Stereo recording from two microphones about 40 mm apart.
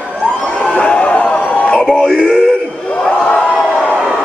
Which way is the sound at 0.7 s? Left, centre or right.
Left.